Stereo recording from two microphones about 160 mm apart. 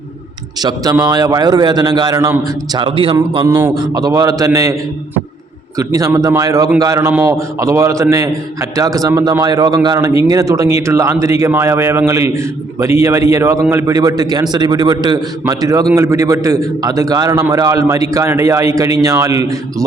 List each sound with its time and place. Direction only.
0.6 s a man's voice: 25° right (ahead or behind)
3.2 s a man's voice: 20° right (ahead or behind)
5.7 s a man's voice: 20° right (ahead or behind)